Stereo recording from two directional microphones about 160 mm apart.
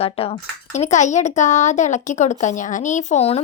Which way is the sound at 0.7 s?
50° left (ahead or behind).